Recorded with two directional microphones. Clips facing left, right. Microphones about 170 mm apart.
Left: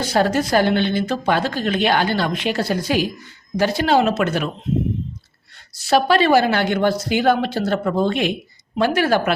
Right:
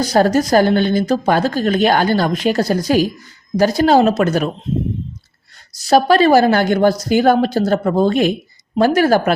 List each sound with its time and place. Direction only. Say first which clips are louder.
0.0 s speech: right 5 dB; 40° right (ahead or behind)
5.7 s speech: right 4 dB; 40° right (ahead or behind)